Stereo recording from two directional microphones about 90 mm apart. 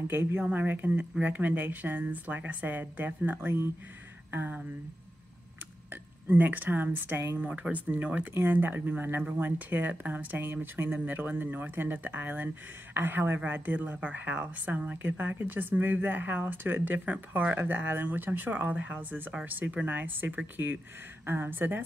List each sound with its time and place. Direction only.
0.1 s speech: 25° right (ahead or behind)
6.2 s speech: 20° right (ahead or behind)